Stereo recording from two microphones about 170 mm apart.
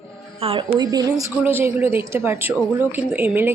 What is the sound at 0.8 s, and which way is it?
A woman's voice, 20° right (ahead or behind).